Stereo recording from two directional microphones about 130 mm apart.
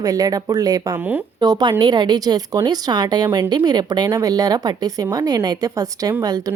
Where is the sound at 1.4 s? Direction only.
35° right (ahead or behind).